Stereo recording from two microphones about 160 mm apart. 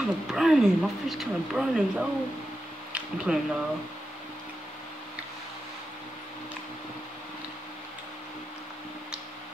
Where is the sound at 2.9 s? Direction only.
5° right (ahead or behind).